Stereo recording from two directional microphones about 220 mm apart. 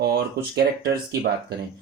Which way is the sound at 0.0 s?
45° right (ahead or behind).